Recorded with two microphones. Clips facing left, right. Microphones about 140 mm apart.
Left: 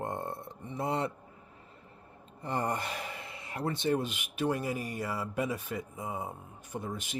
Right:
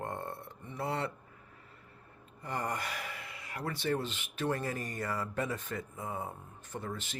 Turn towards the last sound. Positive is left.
turn(degrees=15)  # may be behind; listen again after turning